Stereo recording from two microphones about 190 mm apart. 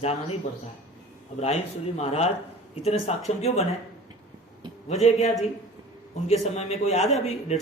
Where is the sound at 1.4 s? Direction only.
35° left (ahead or behind).